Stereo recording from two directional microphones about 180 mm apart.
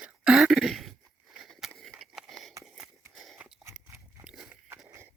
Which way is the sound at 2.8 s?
Centre (ahead or behind).